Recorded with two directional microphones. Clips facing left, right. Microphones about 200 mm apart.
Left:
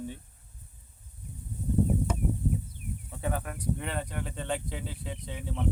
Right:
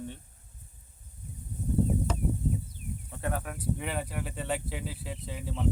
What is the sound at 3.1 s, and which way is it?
Speech, centre (ahead or behind).